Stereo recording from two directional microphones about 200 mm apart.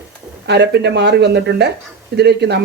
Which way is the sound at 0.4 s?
55° right (ahead or behind).